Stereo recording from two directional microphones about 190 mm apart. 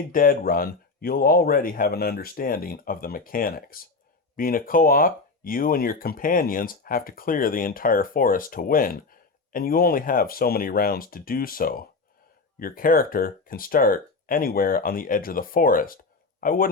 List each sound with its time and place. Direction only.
0.1 s speech: 50° left (ahead or behind)